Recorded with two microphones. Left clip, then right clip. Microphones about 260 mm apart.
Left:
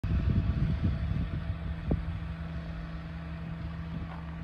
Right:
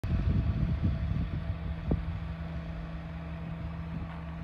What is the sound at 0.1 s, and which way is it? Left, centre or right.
Vehicle, right.